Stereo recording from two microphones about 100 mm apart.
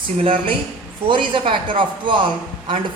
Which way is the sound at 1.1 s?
55° right (ahead or behind).